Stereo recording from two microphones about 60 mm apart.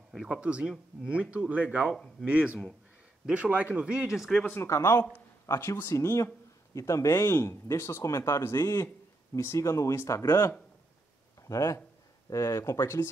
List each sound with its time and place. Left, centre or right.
0.3 s speech: centre
4.6 s speech: left